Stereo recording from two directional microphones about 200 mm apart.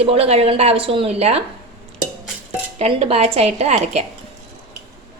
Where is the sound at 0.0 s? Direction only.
30° right (ahead or behind).